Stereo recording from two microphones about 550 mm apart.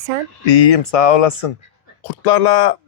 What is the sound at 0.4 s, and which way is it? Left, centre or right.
Speech, left.